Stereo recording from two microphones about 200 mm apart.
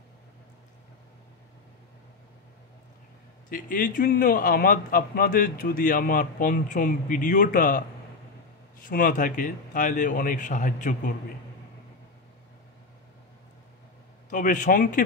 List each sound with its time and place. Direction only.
3.4 s a man's voice: 40° left (ahead or behind)
8.8 s a man's voice: 45° left (ahead or behind)
14.3 s a man's voice: 40° left (ahead or behind)